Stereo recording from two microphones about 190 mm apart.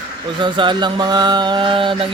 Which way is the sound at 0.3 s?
25° right (ahead or behind).